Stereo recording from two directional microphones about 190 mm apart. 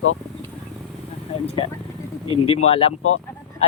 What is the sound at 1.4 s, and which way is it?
Speech, 30° left (ahead or behind).